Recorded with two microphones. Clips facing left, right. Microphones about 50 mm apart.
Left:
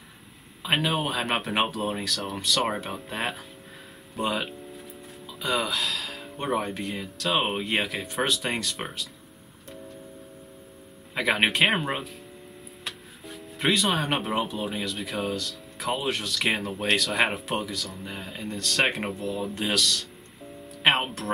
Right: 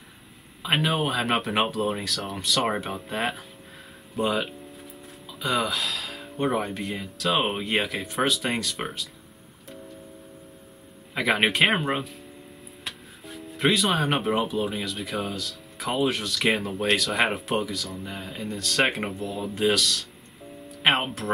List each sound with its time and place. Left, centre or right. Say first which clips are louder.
0.6 s speech: right 1 dB; centre
4.1 s music: right 3 dB; centre
5.4 s speech: right 1 dB; centre
11.1 s speech: right 1 dB; centre